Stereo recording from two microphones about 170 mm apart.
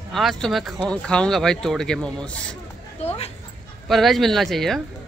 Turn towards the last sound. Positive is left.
turn(degrees=0)  # may be behind; listen again after turning